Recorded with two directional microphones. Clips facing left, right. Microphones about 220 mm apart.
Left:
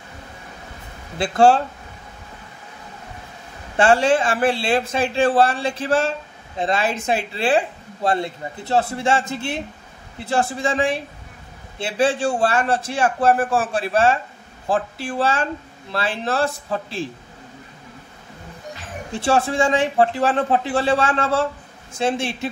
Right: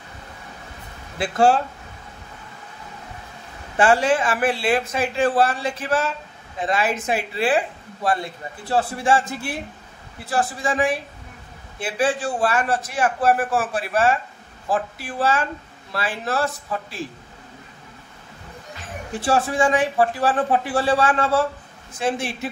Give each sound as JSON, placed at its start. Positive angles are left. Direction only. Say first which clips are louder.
{"t": 3.8, "sound": "a man's voice", "louder": "left 2 dB", "side_deg": 25}
{"t": 19.2, "sound": "a man's voice", "louder": "left 1 dB", "side_deg": 25}